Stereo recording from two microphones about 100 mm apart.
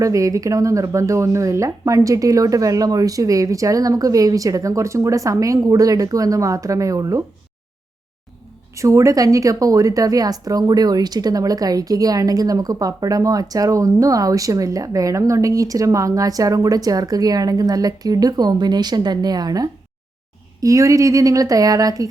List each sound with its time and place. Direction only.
0.0 s speech: 35° right (ahead or behind)
8.7 s speech: 30° right (ahead or behind)